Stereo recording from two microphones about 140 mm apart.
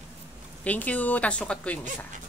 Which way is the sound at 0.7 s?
10° left (ahead or behind).